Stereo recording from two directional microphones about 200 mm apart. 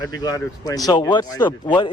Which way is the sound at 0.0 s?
20° left (ahead or behind).